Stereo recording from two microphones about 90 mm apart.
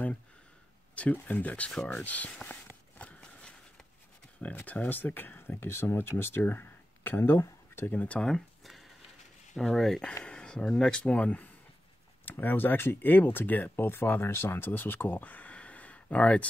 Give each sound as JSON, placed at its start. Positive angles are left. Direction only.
{"t": 0.9, "sound": "speech", "side_deg": 15}
{"t": 2.4, "sound": "walk", "side_deg": 15}
{"t": 4.4, "sound": "speech", "side_deg": 15}